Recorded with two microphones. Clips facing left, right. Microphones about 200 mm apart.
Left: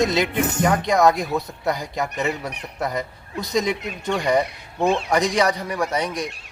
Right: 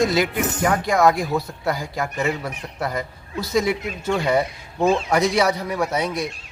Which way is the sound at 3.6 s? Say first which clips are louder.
Right 2 dB; 5° right (ahead or behind).